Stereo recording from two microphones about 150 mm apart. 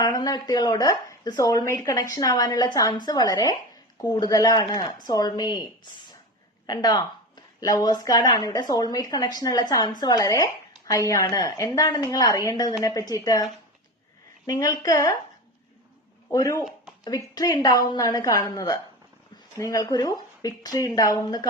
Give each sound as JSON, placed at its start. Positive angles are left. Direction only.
{"t": 0.0, "sound": "speech", "side_deg": 25}
{"t": 6.7, "sound": "speech", "side_deg": 25}
{"t": 16.3, "sound": "speech", "side_deg": 20}